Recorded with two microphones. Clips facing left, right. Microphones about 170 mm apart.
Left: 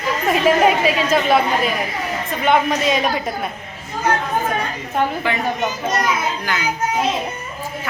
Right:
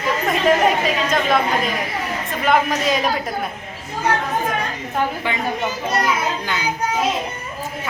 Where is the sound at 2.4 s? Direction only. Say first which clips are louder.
Left 1 dB; centre (ahead or behind).